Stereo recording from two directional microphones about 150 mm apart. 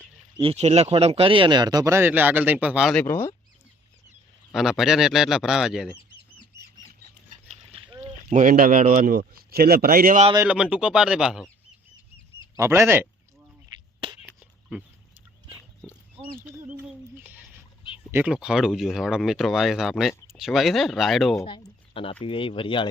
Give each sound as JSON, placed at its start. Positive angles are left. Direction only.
{"t": 0.3, "sound": "speech", "side_deg": -40}
{"t": 2.9, "sound": "speech", "side_deg": 10}
{"t": 4.5, "sound": "speech", "side_deg": 0}
{"t": 7.4, "sound": "a sound", "side_deg": -50}
{"t": 8.3, "sound": "speech", "side_deg": -60}
{"t": 10.4, "sound": "speech", "side_deg": -5}
{"t": 12.5, "sound": "speech", "side_deg": -20}
{"t": 14.2, "sound": "a sound", "side_deg": -5}
{"t": 18.1, "sound": "speech", "side_deg": -10}
{"t": 21.4, "sound": "speech", "side_deg": 35}